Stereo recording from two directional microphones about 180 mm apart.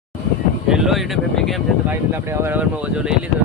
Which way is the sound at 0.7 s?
Centre (ahead or behind).